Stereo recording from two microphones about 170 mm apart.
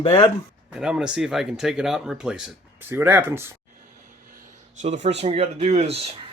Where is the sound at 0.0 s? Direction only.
25° left (ahead or behind).